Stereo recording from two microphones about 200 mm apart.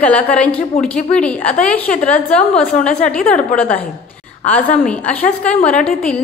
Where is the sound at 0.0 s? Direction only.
5° left (ahead or behind).